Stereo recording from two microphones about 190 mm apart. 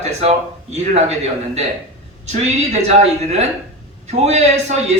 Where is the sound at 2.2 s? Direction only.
35° right (ahead or behind).